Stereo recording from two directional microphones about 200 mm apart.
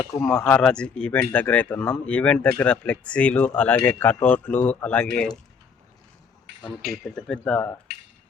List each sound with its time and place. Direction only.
0.2 s speech: 5° left (ahead or behind)
6.5 s a sound: 65° right (ahead or behind)
7.0 s speech: 5° left (ahead or behind)